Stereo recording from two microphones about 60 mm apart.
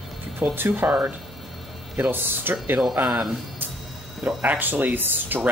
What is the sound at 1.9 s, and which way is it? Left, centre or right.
Speech, right.